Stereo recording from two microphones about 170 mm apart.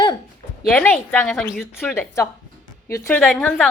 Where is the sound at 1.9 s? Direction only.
15° left (ahead or behind).